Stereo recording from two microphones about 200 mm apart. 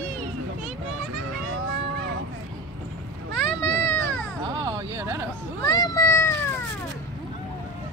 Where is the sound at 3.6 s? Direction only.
10° left (ahead or behind).